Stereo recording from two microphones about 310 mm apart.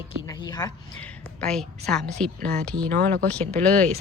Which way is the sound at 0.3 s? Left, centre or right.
Centre.